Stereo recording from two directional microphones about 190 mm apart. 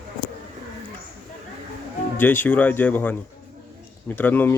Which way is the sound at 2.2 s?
10° left (ahead or behind).